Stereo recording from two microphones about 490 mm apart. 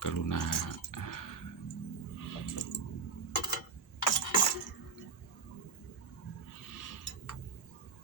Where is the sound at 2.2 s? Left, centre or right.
Left.